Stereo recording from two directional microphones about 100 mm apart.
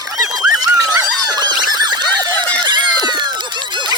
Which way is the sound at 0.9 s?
40° right (ahead or behind).